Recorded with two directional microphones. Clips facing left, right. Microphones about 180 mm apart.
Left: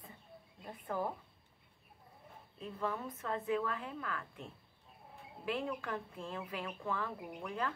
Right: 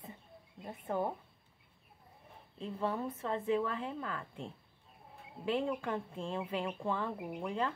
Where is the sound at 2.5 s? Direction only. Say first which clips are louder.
Right 3 dB; 30° right (ahead or behind).